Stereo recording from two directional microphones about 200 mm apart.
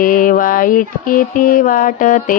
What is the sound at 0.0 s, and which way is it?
Mantra, 45° left (ahead or behind).